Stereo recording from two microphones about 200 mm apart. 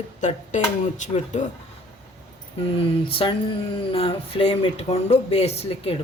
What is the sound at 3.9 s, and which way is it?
Speech, 30° left (ahead or behind).